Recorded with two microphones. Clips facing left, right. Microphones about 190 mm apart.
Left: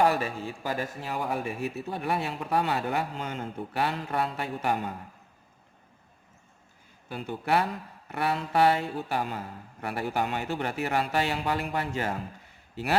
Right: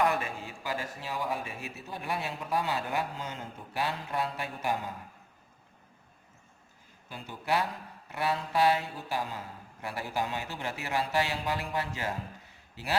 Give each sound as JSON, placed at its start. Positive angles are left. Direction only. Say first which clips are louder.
{"t": 0.0, "sound": "speech", "louder": "left 4 dB", "side_deg": 35}
{"t": 7.1, "sound": "speech", "louder": "left 4 dB", "side_deg": 60}